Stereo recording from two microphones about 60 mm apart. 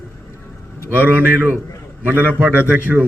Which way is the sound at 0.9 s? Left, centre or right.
Right.